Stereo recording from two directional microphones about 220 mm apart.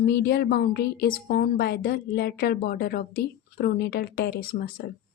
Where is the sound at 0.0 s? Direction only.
50° left (ahead or behind).